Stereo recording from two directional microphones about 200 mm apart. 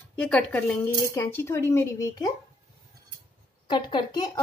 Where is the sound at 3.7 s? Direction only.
25° left (ahead or behind).